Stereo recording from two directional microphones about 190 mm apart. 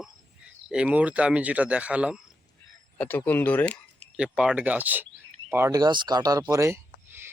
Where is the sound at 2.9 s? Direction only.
10° left (ahead or behind).